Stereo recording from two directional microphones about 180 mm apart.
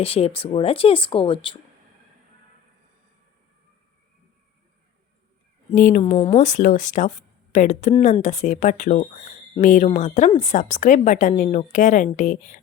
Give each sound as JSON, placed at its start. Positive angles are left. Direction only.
{"t": 0.0, "sound": "speech", "side_deg": 35}
{"t": 5.7, "sound": "a woman's voice", "side_deg": 45}
{"t": 6.0, "sound": "a woman's voice", "side_deg": 30}